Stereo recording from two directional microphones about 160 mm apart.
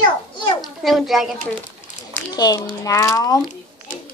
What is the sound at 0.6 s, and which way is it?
Speech, centre (ahead or behind).